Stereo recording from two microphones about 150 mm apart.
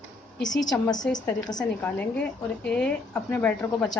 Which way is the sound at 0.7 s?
25° left (ahead or behind).